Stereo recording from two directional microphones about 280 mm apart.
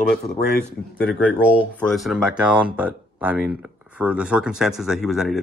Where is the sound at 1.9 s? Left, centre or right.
Centre.